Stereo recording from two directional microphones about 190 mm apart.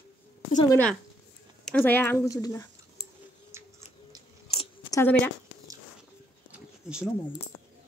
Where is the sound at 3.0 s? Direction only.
60° left (ahead or behind).